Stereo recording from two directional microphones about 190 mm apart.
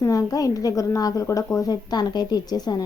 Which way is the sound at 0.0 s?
20° left (ahead or behind).